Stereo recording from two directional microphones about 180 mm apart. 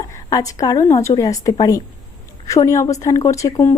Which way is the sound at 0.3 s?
20° left (ahead or behind).